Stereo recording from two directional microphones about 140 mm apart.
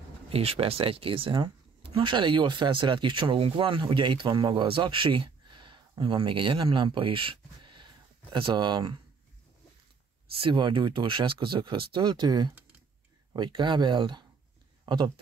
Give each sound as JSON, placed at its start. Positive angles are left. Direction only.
{"t": 0.3, "sound": "speech", "side_deg": -45}
{"t": 10.4, "sound": "speech", "side_deg": -35}